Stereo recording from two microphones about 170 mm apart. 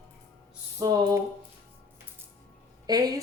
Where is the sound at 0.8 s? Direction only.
20° right (ahead or behind).